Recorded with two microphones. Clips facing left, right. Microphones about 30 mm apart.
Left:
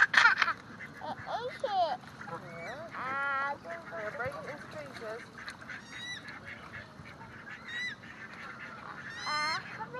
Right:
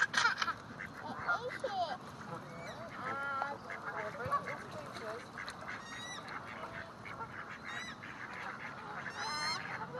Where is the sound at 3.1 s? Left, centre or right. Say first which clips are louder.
Left 7 dB; left.